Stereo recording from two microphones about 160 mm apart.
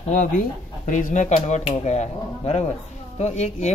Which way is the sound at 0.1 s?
60° left (ahead or behind).